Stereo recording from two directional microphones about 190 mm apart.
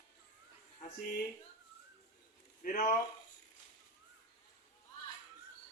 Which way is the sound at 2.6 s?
45° left (ahead or behind).